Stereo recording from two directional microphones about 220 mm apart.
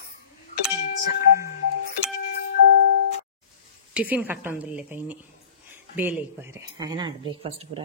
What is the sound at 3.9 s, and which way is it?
Speech, 5° right (ahead or behind).